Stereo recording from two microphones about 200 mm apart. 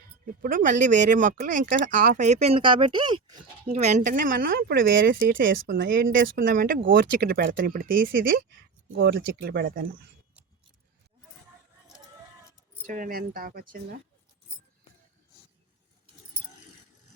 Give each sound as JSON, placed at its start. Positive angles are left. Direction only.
{"t": 0.3, "sound": "speech", "side_deg": -45}
{"t": 3.8, "sound": "speech", "side_deg": -35}
{"t": 8.9, "sound": "speech", "side_deg": -55}
{"t": 12.9, "sound": "speech", "side_deg": -45}